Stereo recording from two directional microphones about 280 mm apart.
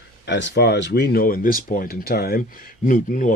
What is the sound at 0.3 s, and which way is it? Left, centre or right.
Speech, left.